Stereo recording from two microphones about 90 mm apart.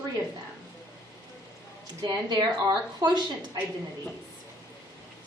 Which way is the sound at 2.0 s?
50° right (ahead or behind).